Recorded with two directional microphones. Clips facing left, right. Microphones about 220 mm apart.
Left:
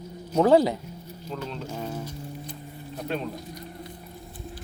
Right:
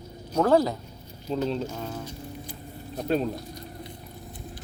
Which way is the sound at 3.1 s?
40° right (ahead or behind).